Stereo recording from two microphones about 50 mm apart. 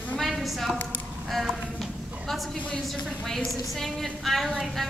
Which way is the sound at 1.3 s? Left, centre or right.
Centre.